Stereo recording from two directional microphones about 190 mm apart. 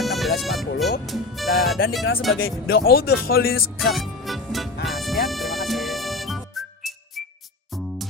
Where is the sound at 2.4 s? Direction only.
55° left (ahead or behind).